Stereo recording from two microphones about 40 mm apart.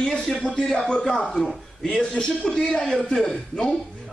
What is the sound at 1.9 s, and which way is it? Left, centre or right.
A man's voice, left.